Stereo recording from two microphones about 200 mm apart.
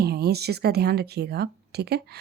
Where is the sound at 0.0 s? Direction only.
55° right (ahead or behind).